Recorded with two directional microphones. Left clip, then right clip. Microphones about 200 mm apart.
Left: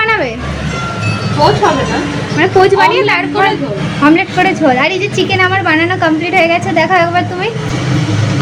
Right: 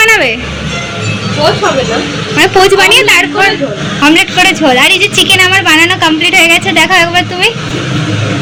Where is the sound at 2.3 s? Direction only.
Centre (ahead or behind).